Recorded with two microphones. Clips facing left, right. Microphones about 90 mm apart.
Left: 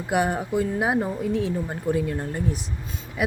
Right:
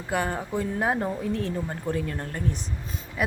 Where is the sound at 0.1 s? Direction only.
15° left (ahead or behind).